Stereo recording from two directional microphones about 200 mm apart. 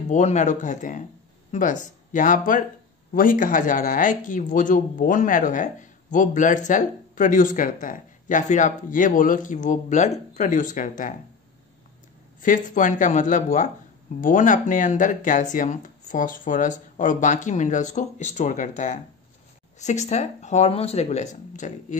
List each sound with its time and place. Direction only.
0.1 s speech: 35° left (ahead or behind)
12.4 s speech: 40° left (ahead or behind)